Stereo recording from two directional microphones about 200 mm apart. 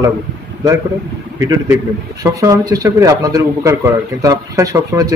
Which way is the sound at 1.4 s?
15° right (ahead or behind).